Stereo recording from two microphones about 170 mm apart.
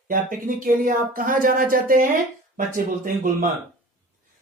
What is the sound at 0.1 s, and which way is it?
Speech, 50° right (ahead or behind).